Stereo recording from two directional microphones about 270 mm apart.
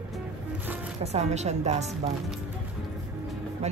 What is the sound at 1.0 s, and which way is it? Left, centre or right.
Speech, right.